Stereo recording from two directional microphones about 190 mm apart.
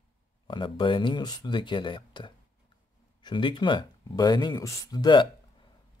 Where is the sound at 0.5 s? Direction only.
25° left (ahead or behind).